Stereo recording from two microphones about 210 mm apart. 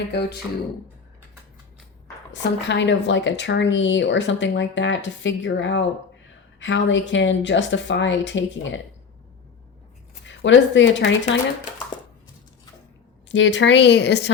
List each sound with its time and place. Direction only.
0.1 s speech: 50° left (ahead or behind)
2.3 s speech: 55° left (ahead or behind)
10.2 s speech: 60° left (ahead or behind)
13.2 s speech: 60° left (ahead or behind)